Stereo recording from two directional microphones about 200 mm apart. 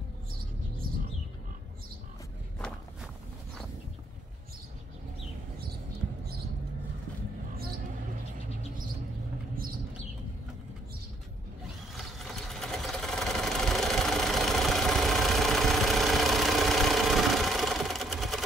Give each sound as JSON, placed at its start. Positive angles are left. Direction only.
{"t": 0.8, "sound": "bird", "side_deg": -45}
{"t": 12.0, "sound": "sewing machine", "side_deg": 0}